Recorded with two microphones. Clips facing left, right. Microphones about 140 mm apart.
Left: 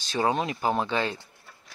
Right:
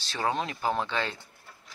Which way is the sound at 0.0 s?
15° left (ahead or behind).